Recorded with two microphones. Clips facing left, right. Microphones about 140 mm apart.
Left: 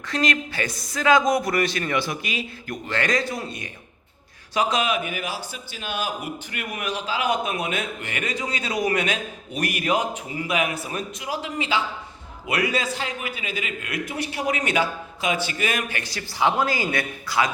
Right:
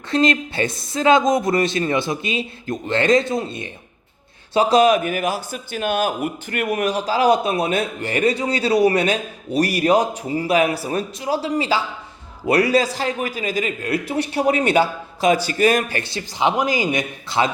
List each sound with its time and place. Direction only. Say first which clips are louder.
0.1 s a man's voice: right 6 dB; 30° right (ahead or behind)